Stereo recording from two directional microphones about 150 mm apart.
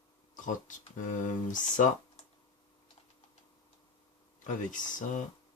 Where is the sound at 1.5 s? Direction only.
60° left (ahead or behind).